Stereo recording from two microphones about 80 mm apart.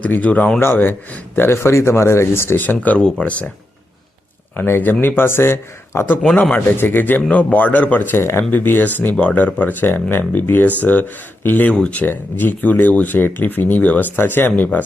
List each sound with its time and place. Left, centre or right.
0.0 s speech: centre
4.5 s speech: left